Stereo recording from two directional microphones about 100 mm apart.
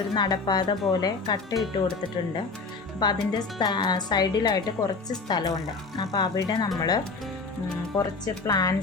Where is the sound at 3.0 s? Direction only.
45° left (ahead or behind).